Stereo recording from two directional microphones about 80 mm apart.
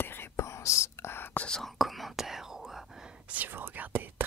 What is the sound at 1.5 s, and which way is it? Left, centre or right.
Whispering, centre.